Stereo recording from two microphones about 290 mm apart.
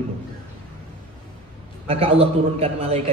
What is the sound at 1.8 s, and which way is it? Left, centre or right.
A man's voice, right.